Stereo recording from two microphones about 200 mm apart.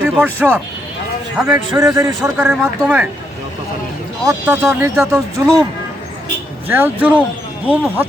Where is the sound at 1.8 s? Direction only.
20° right (ahead or behind).